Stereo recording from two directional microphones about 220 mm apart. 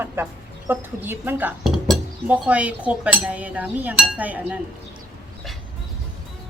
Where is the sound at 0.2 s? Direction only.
10° right (ahead or behind).